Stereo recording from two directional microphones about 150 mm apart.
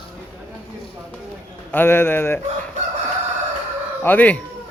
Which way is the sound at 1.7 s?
15° left (ahead or behind).